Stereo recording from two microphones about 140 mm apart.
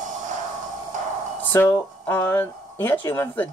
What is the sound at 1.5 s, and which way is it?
Speech, 15° left (ahead or behind).